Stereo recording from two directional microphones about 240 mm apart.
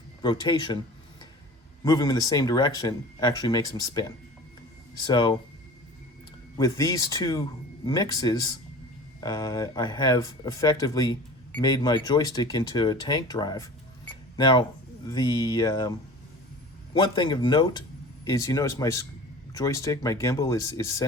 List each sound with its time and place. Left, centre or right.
0.2 s speech: centre
1.8 s speech: centre
6.6 s speech: centre
16.9 s speech: centre